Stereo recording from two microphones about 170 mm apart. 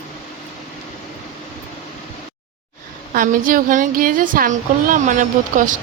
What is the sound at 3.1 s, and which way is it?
Speech, 55° right (ahead or behind).